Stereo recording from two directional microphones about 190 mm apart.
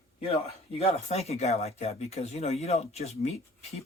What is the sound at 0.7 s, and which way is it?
Speech, 35° left (ahead or behind).